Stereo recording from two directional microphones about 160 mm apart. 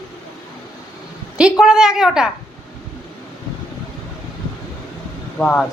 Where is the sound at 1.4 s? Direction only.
5° right (ahead or behind).